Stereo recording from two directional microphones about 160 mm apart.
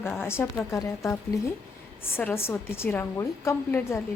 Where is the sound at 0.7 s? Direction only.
20° left (ahead or behind).